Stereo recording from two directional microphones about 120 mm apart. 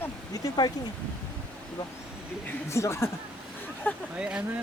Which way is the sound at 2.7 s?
25° left (ahead or behind).